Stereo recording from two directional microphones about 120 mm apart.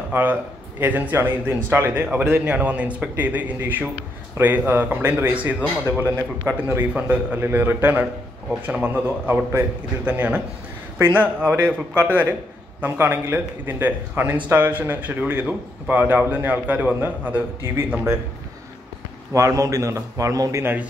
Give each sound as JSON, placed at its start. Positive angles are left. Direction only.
{"t": 0.1, "sound": "speech", "side_deg": -15}
{"t": 19.3, "sound": "a man's voice", "side_deg": -25}